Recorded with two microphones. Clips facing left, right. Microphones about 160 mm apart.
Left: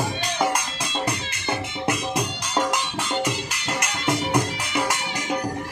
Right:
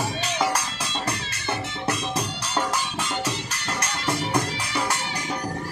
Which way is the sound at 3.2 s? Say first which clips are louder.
Left 2 dB; 10° left (ahead or behind).